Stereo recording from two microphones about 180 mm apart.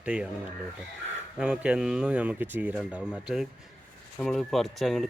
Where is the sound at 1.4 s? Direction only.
5° right (ahead or behind).